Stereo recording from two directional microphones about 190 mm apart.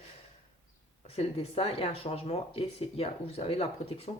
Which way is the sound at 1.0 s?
30° left (ahead or behind).